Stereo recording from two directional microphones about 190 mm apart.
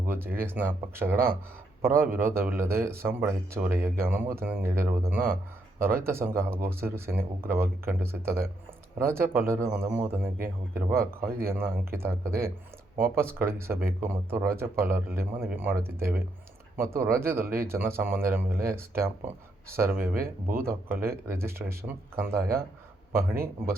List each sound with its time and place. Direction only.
0.1 s speech: 10° right (ahead or behind)
20.2 s speech: 50° right (ahead or behind)
20.7 s speech: 10° right (ahead or behind)